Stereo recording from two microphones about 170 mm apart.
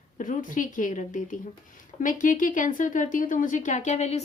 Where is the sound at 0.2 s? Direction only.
50° left (ahead or behind).